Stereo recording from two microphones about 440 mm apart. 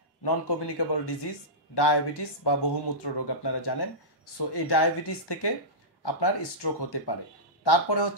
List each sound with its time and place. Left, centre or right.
0.2 s speech: left